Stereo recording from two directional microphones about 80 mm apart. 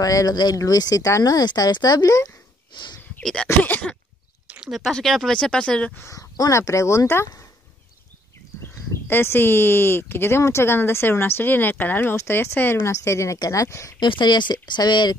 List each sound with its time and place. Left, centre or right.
0.0 s speech: left
2.7 s speech: left
3.2 s a sound: centre
3.6 s speech: left
4.5 s a sound: centre
4.9 s speech: centre
6.0 s speech: left
9.0 s speech: left
13.9 s speech: left